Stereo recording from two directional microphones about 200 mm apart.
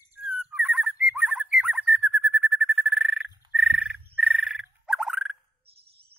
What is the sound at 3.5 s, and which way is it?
Frog, 5° right (ahead or behind).